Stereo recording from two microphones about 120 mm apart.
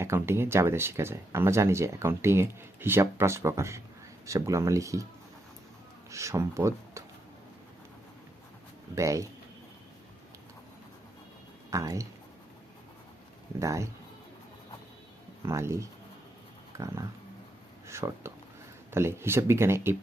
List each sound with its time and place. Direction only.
0.0 s speech: 20° right (ahead or behind)
6.1 s speech: 25° right (ahead or behind)
9.0 s speech: 25° right (ahead or behind)
11.7 s speech: 25° right (ahead or behind)
13.6 s speech: 25° right (ahead or behind)
15.4 s speech: 25° right (ahead or behind)